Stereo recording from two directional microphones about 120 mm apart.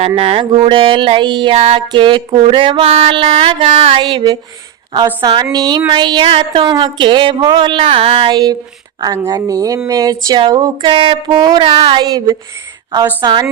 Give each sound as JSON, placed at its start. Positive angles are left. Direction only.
{"t": 0.2, "sound": "speech", "side_deg": -50}
{"t": 1.5, "sound": "music", "side_deg": -60}
{"t": 1.9, "sound": "speech", "side_deg": -40}
{"t": 4.0, "sound": "speech", "side_deg": -35}
{"t": 8.3, "sound": "speech", "side_deg": -35}
{"t": 11.7, "sound": "speech", "side_deg": -50}
{"t": 12.0, "sound": "speech", "side_deg": -30}